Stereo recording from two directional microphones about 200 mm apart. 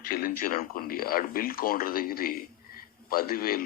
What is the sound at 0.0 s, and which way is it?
A man's voice, 45° left (ahead or behind).